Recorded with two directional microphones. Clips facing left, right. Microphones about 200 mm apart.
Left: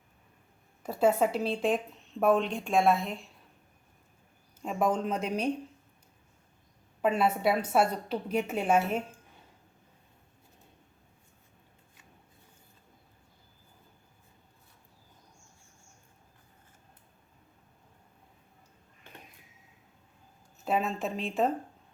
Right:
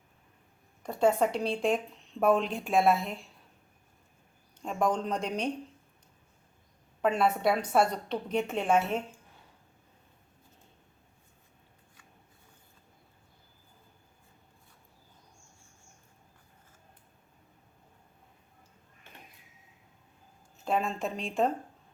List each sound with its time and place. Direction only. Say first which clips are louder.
0.8 s a woman's voice: even; 5° left (ahead or behind)
4.6 s a woman's voice: left 1 dB; 5° left (ahead or behind)
7.0 s a woman's voice: even; 5° left (ahead or behind)
20.7 s a woman's voice: even; 5° left (ahead or behind)